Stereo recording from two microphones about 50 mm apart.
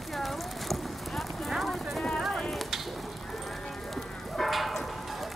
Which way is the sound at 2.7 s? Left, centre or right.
Centre.